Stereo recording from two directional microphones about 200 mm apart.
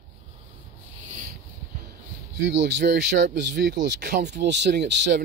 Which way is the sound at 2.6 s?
60° right (ahead or behind).